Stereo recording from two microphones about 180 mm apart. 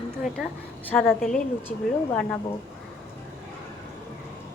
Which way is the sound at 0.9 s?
5° left (ahead or behind).